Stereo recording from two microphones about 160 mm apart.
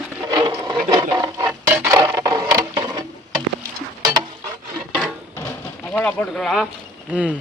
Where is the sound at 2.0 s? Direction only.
25° right (ahead or behind).